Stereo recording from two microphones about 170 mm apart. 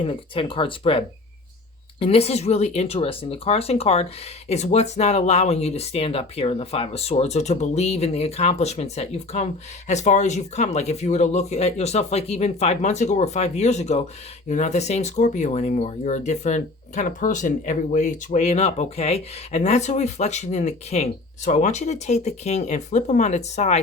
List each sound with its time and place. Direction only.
0.0 s speech: 30° left (ahead or behind)